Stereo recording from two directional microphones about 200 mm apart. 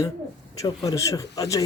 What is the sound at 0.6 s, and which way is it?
Speech, 15° left (ahead or behind).